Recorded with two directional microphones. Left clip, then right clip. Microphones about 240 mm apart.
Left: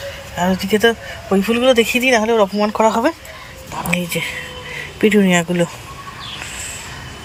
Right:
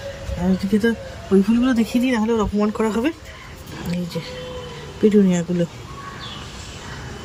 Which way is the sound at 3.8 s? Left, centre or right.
Left.